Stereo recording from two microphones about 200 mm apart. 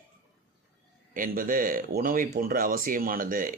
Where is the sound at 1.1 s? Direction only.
45° right (ahead or behind).